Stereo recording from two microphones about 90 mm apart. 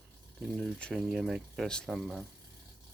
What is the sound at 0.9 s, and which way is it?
Speech, 5° right (ahead or behind).